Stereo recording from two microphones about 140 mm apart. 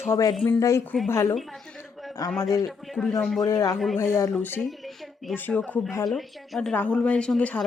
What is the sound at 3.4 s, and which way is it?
A woman's voice, 25° left (ahead or behind).